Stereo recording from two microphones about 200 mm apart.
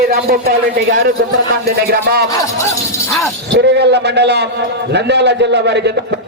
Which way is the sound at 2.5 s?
15° left (ahead or behind).